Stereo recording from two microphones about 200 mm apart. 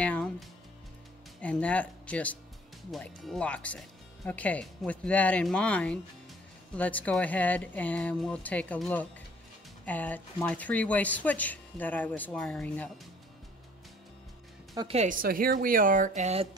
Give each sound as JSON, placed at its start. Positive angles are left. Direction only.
{"t": 0.0, "sound": "speech", "side_deg": 5}
{"t": 14.8, "sound": "a woman's voice", "side_deg": -30}
{"t": 15.0, "sound": "speech", "side_deg": -45}
{"t": 16.2, "sound": "music", "side_deg": -35}